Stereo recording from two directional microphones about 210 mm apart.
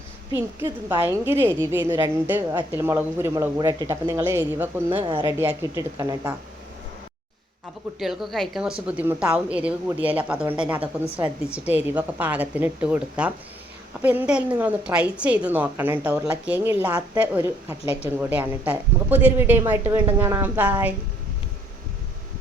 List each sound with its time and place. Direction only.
0.3 s a woman's voice: 10° right (ahead or behind)
7.9 s a woman's voice: centre (ahead or behind)